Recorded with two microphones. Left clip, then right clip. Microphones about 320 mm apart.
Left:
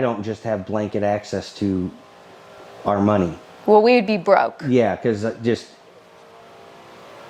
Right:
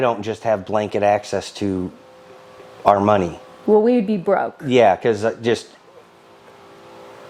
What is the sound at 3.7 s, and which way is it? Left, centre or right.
Speech, left.